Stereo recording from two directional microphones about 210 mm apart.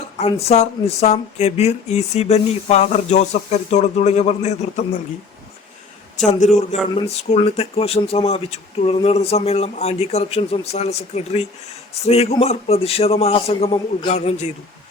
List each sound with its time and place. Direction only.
0.2 s speech: 30° left (ahead or behind)
6.1 s speech: 35° left (ahead or behind)